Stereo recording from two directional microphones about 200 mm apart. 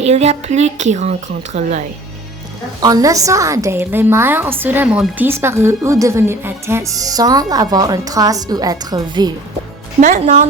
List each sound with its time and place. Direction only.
0.0 s a woman's voice: 35° right (ahead or behind)
2.8 s a woman's voice: 20° right (ahead or behind)
10.0 s a woman's voice: 35° right (ahead or behind)